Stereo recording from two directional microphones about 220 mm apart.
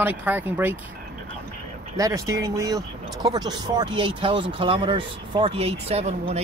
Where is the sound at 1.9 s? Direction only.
15° right (ahead or behind).